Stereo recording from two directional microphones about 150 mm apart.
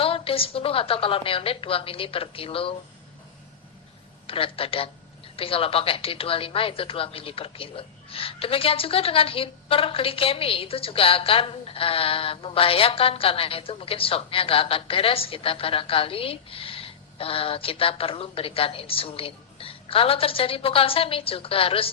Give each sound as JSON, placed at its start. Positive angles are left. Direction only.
{"t": 0.0, "sound": "speech", "side_deg": 40}
{"t": 4.3, "sound": "speech", "side_deg": 40}